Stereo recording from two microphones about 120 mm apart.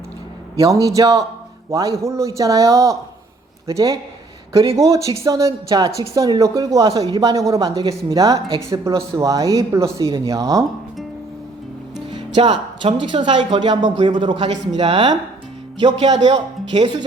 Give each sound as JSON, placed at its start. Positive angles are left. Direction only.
{"t": 0.6, "sound": "speech", "side_deg": -25}
{"t": 12.1, "sound": "speech", "side_deg": -40}
{"t": 16.1, "sound": "a man's voice", "side_deg": -65}